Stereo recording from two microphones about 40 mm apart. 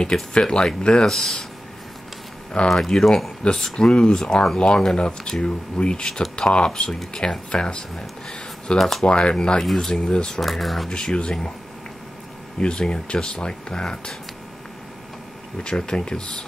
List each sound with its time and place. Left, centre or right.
0.0 s speech: left
2.7 s speech: centre
3.7 s speech: left
8.7 s speech: centre
9.0 s speech: left
9.6 s speech: centre
9.9 s speech: left
10.4 s speech: centre
10.9 s speech: left
12.5 s speech: left
15.6 s speech: left